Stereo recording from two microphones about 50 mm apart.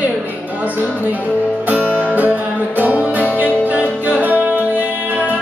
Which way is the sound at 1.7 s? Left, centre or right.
Right.